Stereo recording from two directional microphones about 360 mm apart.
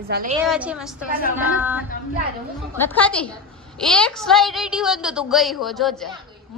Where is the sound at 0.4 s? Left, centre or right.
Centre.